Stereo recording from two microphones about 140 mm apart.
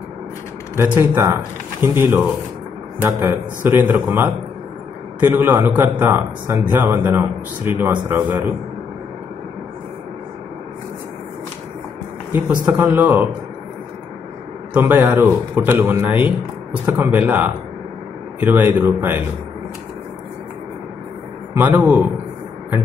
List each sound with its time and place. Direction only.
0.7 s a man's voice: 15° right (ahead or behind)
12.3 s a man's voice: 15° right (ahead or behind)
14.7 s a man's voice: 10° right (ahead or behind)
21.5 s a man's voice: 10° right (ahead or behind)